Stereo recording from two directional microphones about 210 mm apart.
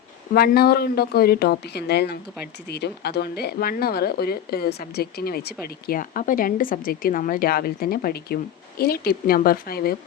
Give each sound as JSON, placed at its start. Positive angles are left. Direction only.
{"t": 0.3, "sound": "speech", "side_deg": 45}